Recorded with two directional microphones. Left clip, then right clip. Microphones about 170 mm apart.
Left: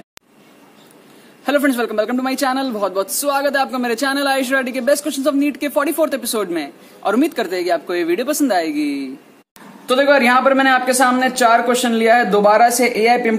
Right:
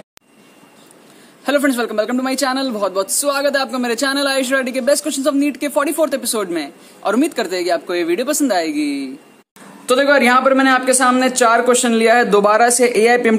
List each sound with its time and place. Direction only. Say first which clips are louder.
1.4 s a man's voice: even; 10° right (ahead or behind)
9.8 s a man's voice: even; 20° right (ahead or behind); by 13.4 s 40° right (ahead or behind)